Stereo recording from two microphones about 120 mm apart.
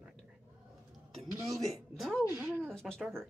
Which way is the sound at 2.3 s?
20° right (ahead or behind).